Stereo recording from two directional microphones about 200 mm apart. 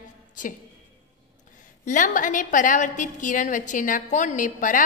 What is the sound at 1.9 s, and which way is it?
A woman's voice, 40° left (ahead or behind).